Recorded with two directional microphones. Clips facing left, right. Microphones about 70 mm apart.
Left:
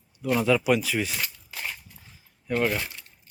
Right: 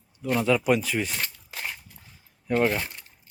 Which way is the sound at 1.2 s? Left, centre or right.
Right.